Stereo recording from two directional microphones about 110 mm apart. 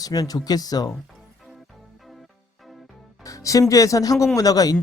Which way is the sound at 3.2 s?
30° left (ahead or behind).